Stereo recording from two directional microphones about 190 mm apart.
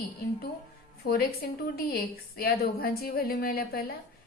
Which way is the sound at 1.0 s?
55° left (ahead or behind).